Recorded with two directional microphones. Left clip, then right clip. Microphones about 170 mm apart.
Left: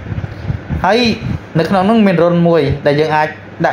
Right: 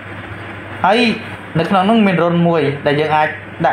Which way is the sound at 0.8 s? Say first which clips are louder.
Left 1 dB; 25° left (ahead or behind).